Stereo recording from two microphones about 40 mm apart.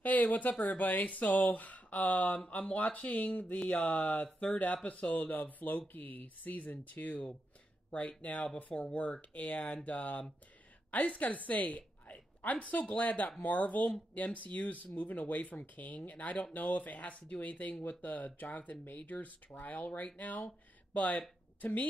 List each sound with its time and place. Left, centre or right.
0.0 s a woman's voice: left